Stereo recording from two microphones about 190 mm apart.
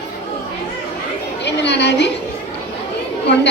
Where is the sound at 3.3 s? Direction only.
65° left (ahead or behind).